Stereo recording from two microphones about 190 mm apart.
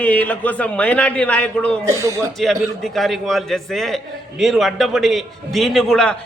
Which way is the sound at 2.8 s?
Centre (ahead or behind).